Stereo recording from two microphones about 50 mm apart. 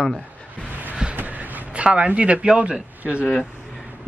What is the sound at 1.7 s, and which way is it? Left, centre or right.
Speech, right.